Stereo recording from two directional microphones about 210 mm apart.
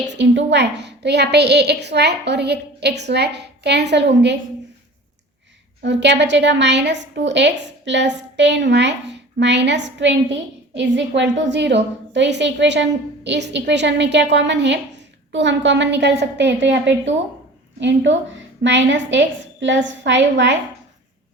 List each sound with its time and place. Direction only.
0.1 s a woman's voice: 55° right (ahead or behind)
5.8 s a woman's voice: 55° right (ahead or behind)